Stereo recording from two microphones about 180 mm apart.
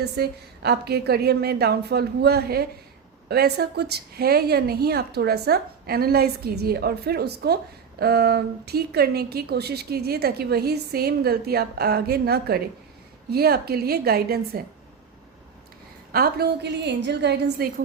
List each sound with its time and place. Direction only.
0.0 s a woman's voice: 65° right (ahead or behind)
16.1 s a woman's voice: 60° right (ahead or behind)